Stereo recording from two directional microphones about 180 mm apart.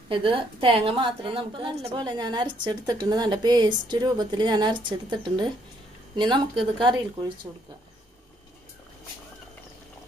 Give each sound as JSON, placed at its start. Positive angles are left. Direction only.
{"t": 0.1, "sound": "a woman's voice", "side_deg": -30}